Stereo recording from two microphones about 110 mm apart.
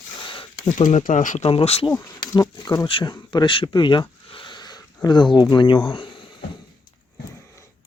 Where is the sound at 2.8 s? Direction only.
50° left (ahead or behind).